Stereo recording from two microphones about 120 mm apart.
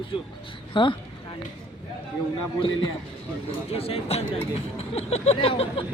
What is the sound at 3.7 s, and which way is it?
Speech, 55° left (ahead or behind).